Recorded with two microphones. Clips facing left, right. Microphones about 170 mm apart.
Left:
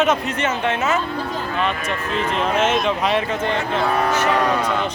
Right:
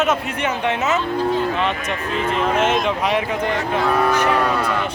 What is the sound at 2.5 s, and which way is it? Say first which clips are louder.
Speech: even; 15° right (ahead or behind).